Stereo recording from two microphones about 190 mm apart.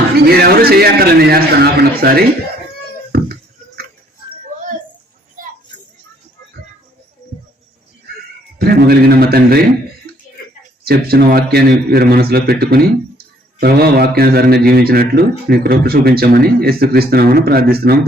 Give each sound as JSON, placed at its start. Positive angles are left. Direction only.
{"t": 0.3, "sound": "a man's voice", "side_deg": -55}
{"t": 3.1, "sound": "a sound", "side_deg": -55}
{"t": 8.5, "sound": "a man's voice", "side_deg": -55}
{"t": 10.8, "sound": "a man's voice", "side_deg": -55}